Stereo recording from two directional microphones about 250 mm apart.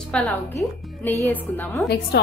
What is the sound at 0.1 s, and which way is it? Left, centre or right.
A woman's voice, centre.